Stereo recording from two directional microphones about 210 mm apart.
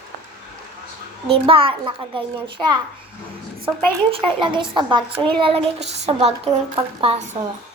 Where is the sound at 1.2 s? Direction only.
25° right (ahead or behind).